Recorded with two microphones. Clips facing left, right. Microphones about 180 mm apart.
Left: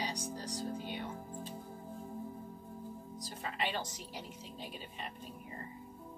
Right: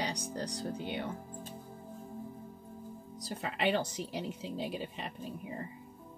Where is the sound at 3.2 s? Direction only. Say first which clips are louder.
Right 5 dB; 75° right (ahead or behind).